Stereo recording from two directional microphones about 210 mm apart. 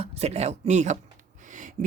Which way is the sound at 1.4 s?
35° right (ahead or behind).